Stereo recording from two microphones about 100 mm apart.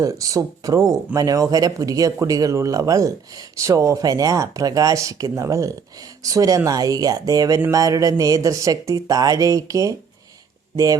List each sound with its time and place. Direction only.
0.0 s speech: 35° right (ahead or behind)